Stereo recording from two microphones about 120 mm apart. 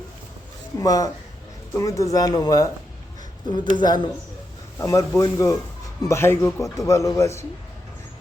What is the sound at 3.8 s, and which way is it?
Speech, 35° left (ahead or behind).